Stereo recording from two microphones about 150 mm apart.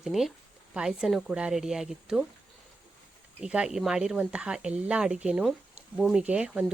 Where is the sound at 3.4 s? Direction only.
5° right (ahead or behind).